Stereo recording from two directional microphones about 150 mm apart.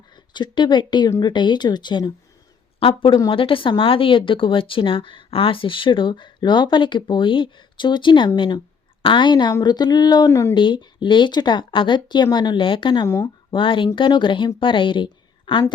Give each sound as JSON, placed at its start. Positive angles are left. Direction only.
{"t": 0.3, "sound": "speech", "side_deg": 30}
{"t": 10.5, "sound": "speech", "side_deg": 30}